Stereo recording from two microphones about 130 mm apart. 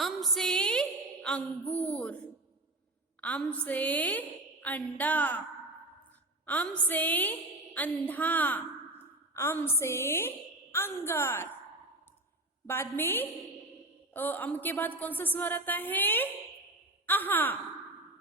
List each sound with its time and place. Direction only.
0.0 s a sound: centre (ahead or behind)
3.2 s a woman's voice: 10° left (ahead or behind)
12.6 s a woman's voice: 15° left (ahead or behind)